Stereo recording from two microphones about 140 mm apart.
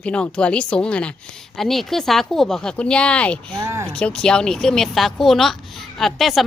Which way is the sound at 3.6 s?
20° right (ahead or behind).